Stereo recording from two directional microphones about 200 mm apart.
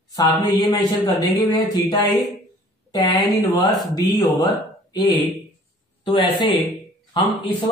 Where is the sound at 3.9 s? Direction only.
20° left (ahead or behind).